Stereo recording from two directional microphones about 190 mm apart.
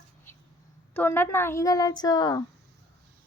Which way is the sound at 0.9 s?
10° left (ahead or behind).